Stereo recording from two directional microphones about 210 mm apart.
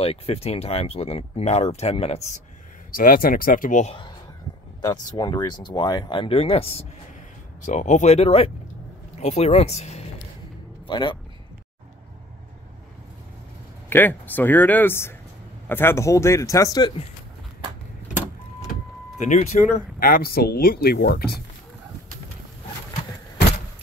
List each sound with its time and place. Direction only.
0.0 s speech: 30° left (ahead or behind)
2.9 s speech: 40° left (ahead or behind)
5.1 s speech: 20° left (ahead or behind)
13.8 s speech: 10° left (ahead or behind)
19.2 s speech: 35° left (ahead or behind)